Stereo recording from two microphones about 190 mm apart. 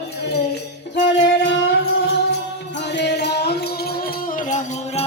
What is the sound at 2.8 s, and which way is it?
Music, 65° left (ahead or behind).